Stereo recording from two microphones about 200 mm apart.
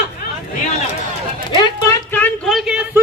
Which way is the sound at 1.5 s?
20° left (ahead or behind).